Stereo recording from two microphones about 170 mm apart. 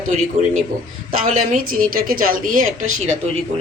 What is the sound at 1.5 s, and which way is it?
A woman's voice, 55° right (ahead or behind).